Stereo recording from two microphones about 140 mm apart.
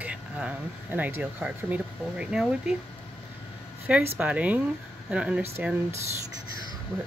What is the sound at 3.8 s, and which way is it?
Speech, 15° right (ahead or behind).